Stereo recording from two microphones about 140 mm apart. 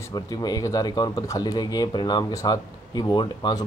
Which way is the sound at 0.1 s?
30° left (ahead or behind).